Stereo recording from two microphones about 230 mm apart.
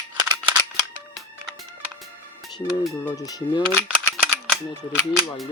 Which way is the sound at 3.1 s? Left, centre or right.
Centre.